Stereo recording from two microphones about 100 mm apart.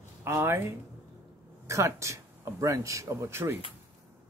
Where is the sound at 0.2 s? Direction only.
25° right (ahead or behind).